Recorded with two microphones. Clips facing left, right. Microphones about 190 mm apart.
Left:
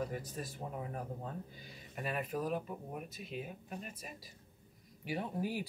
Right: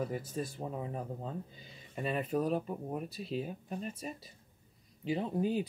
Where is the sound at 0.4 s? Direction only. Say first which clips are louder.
Right 5 dB; 25° right (ahead or behind).